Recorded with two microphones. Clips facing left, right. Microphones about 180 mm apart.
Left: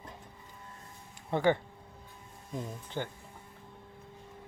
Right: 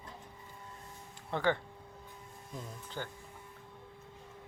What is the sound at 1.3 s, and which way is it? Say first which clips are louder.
Speech: left 4 dB; 15° left (ahead or behind).